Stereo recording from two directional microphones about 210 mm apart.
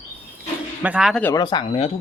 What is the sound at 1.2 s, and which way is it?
Speech, 15° left (ahead or behind).